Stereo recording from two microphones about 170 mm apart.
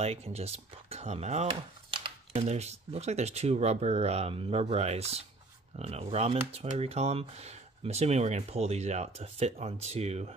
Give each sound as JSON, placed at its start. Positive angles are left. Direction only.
{"t": 0.0, "sound": "speech", "side_deg": -40}
{"t": 1.5, "sound": "typing", "side_deg": -30}
{"t": 2.3, "sound": "speech", "side_deg": -40}